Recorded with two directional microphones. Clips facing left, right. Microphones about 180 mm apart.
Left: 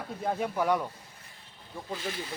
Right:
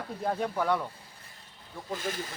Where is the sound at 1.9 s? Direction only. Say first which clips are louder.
Right 2 dB; 45° right (ahead or behind).